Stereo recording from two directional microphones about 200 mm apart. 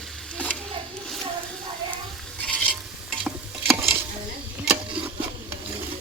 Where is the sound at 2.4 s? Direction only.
Centre (ahead or behind).